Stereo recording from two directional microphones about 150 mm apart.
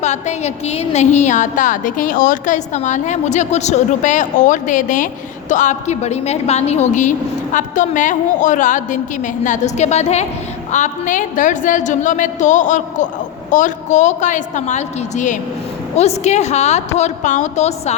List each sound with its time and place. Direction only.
0.0 s a woman's voice: 50° left (ahead or behind)